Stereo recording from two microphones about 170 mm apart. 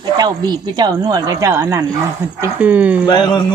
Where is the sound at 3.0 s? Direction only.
25° left (ahead or behind).